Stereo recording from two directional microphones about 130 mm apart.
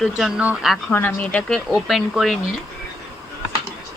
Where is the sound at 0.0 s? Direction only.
5° right (ahead or behind).